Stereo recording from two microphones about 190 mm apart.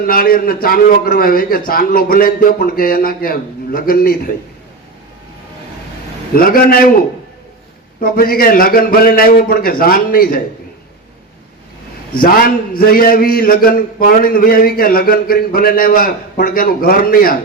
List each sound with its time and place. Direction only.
0.0 s a man's voice: 50° left (ahead or behind)
6.3 s a man's voice: 50° left (ahead or behind)
8.0 s a man's voice: 50° left (ahead or behind)
12.1 s a man's voice: 50° left (ahead or behind)